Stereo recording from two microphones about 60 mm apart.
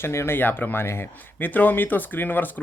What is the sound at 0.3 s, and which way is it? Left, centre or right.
Speech, left.